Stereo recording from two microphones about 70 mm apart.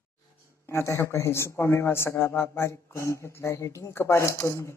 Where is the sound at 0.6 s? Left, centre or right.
Left.